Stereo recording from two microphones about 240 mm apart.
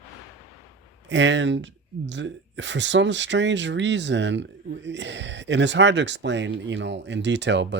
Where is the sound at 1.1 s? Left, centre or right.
Right.